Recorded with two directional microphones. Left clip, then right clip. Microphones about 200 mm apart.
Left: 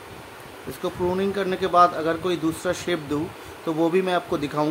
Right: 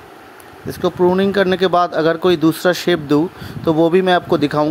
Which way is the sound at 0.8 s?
35° right (ahead or behind).